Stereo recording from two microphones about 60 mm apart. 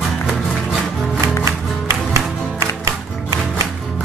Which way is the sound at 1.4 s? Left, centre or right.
Right.